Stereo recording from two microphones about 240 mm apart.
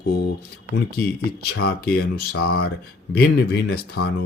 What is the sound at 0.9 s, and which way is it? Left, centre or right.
Speech, left.